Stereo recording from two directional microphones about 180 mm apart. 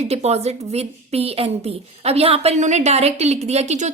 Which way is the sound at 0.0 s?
35° right (ahead or behind).